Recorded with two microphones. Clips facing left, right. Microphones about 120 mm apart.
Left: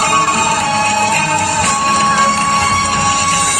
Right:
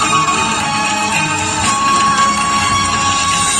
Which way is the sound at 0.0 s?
40° left (ahead or behind).